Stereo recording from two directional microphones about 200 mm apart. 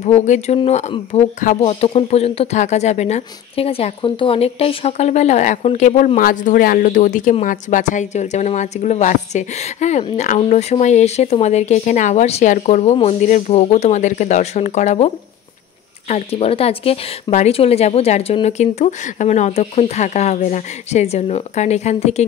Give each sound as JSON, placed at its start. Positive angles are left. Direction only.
{"t": 0.0, "sound": "speech", "side_deg": 35}
{"t": 16.1, "sound": "speech", "side_deg": 30}